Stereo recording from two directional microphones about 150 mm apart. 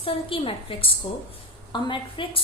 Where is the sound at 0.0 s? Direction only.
40° left (ahead or behind).